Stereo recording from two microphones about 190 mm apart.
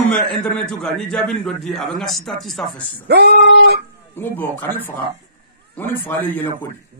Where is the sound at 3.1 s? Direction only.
60° right (ahead or behind).